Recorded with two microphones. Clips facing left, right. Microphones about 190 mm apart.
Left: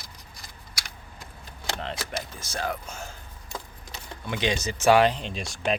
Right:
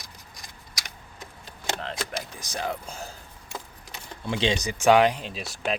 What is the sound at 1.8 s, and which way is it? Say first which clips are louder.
Power windows: right 1 dB; centre (ahead or behind).